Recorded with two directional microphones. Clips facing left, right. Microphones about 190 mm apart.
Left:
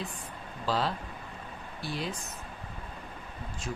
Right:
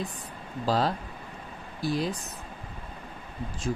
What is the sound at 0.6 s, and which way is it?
Speech, 40° right (ahead or behind).